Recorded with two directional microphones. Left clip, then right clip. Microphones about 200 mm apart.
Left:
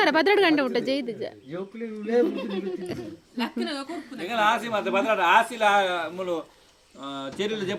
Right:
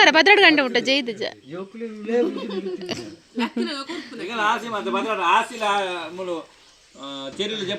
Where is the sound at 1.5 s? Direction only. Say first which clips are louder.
Right 1 dB; 30° right (ahead or behind).